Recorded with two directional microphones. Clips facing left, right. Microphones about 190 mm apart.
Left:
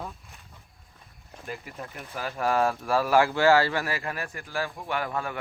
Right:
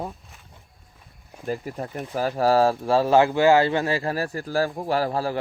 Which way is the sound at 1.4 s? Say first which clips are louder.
Right 9 dB; 40° right (ahead or behind).